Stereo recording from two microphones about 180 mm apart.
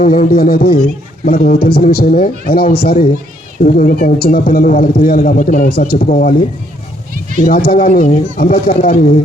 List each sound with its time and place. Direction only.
0.0 s a man's voice: 50° left (ahead or behind)
7.4 s a man's voice: 55° left (ahead or behind)